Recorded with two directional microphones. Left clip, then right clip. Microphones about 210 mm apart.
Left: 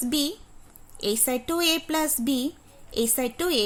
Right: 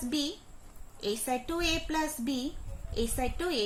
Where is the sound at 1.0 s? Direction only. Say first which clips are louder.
Left 6 dB; 55° left (ahead or behind).